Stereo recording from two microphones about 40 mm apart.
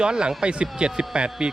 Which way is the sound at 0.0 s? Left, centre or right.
Right.